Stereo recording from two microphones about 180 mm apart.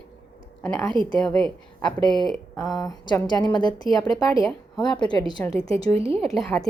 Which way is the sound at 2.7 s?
20° left (ahead or behind).